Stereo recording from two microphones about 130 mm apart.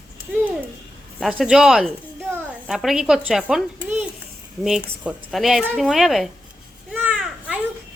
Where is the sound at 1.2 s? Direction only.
Centre (ahead or behind).